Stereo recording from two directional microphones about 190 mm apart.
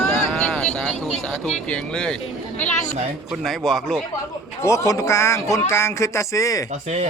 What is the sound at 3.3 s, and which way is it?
Speech, centre (ahead or behind).